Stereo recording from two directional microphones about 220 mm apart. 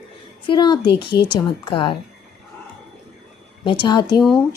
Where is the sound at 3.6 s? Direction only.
20° left (ahead or behind).